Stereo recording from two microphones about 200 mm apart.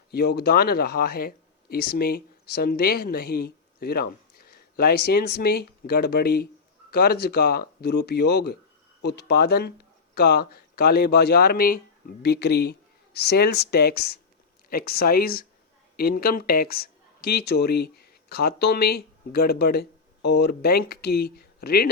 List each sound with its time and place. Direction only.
0.1 s speech: 55° left (ahead or behind)